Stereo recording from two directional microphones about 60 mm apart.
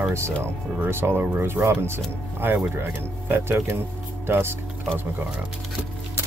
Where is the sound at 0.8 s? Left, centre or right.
Right.